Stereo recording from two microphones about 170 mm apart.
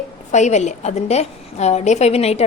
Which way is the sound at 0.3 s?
45° left (ahead or behind).